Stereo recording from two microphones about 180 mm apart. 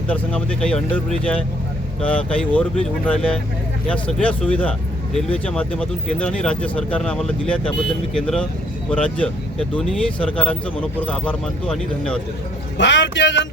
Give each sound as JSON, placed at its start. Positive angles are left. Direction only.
{"t": 0.1, "sound": "speech", "side_deg": 5}
{"t": 12.7, "sound": "speech", "side_deg": 80}